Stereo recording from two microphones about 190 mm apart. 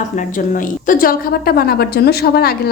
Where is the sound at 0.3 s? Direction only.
45° left (ahead or behind).